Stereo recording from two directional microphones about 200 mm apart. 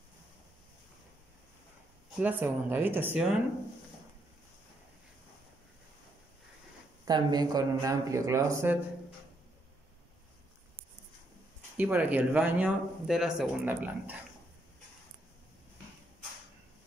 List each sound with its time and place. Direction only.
2.1 s speech: 10° right (ahead or behind)
7.1 s speech: 20° right (ahead or behind)
11.7 s speech: 10° right (ahead or behind)